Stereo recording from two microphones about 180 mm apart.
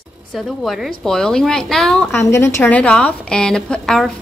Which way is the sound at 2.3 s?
15° left (ahead or behind).